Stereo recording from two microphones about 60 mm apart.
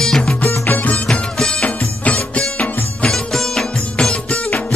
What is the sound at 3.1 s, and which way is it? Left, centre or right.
Music, centre.